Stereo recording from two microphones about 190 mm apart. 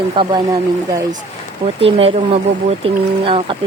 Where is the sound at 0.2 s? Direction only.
25° right (ahead or behind).